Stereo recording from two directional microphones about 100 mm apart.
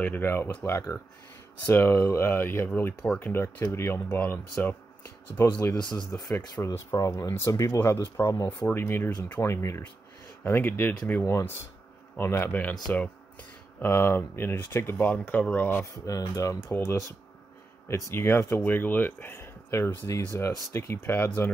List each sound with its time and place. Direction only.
0.0 s speech: 20° left (ahead or behind)
5.4 s speech: 35° left (ahead or behind)
8.5 s speech: 20° left (ahead or behind)
13.7 s speech: 25° left (ahead or behind)
15.8 s speech: 35° left (ahead or behind)